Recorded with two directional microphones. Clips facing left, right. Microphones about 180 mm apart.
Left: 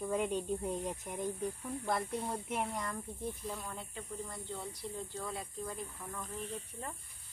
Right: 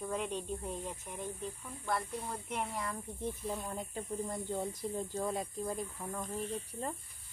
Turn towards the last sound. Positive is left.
turn(degrees=-35)  # may be behind; listen again after turning